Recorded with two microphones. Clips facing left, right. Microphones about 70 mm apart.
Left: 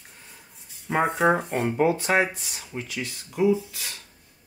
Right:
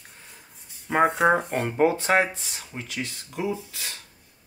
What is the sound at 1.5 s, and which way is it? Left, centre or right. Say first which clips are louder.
Speech: even; right.